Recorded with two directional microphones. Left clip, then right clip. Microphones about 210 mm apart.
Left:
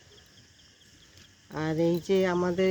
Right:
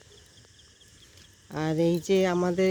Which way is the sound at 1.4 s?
35° right (ahead or behind).